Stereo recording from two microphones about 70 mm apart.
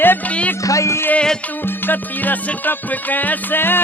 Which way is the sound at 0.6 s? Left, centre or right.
Left.